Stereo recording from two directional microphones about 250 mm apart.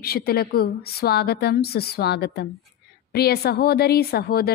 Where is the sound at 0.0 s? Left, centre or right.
Left.